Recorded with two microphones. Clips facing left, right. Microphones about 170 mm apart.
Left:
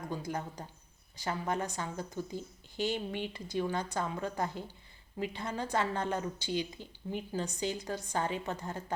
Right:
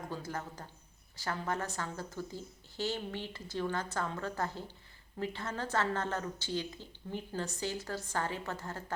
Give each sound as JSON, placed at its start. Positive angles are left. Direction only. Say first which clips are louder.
{"t": 0.1, "sound": "a woman's voice", "louder": "left 5 dB", "side_deg": 15}